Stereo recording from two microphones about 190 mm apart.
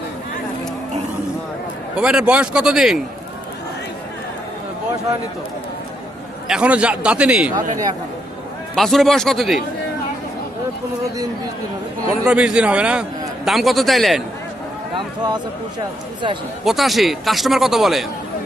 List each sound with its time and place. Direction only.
2.0 s a man's voice: 5° right (ahead or behind)
6.5 s a man's voice: 5° right (ahead or behind)
8.7 s a man's voice: centre (ahead or behind)
12.2 s a man's voice: 5° right (ahead or behind)
14.9 s speech: 20° right (ahead or behind)
16.6 s a man's voice: centre (ahead or behind)